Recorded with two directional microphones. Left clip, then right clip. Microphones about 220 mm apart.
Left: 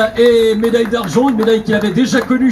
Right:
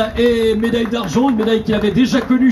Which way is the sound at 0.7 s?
40° right (ahead or behind).